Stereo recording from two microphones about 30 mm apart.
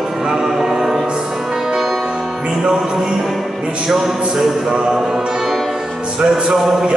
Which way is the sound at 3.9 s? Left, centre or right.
Centre.